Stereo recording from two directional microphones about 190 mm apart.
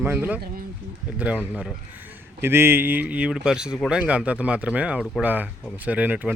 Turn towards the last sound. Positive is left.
turn(degrees=-10)  # may be behind; listen again after turning